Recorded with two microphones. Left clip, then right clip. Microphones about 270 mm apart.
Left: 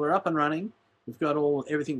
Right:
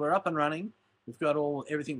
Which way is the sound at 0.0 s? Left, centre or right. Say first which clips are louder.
Left 2 dB; centre.